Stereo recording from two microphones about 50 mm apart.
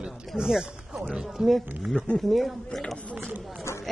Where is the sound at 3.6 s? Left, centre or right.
Left.